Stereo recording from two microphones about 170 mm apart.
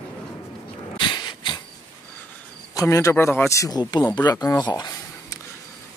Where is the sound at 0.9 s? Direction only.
25° left (ahead or behind).